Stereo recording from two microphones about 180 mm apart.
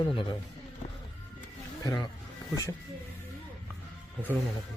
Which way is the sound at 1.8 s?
25° left (ahead or behind).